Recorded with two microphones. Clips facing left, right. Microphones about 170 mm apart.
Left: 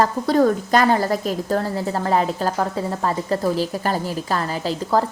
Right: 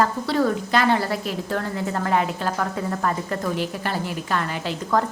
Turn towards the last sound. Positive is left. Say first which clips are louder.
# left 3 dB
turn(degrees=35)  # may be behind; listen again after turning